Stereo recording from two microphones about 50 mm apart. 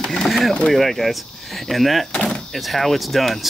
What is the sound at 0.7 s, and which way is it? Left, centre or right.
Speech, centre.